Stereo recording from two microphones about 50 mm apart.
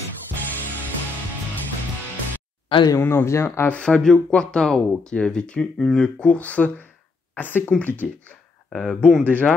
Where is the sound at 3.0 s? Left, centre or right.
Left.